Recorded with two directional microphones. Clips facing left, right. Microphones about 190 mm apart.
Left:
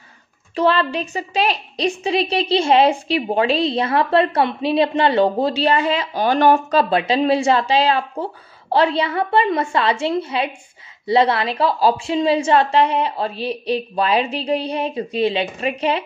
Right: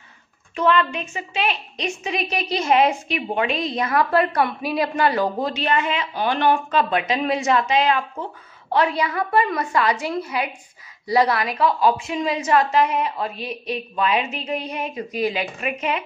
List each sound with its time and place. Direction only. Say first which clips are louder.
0.6 s a woman's voice: left 2 dB; 35° left (ahead or behind)